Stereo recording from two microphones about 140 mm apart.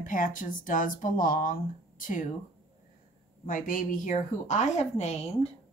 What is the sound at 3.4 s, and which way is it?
A woman's voice, 75° left (ahead or behind).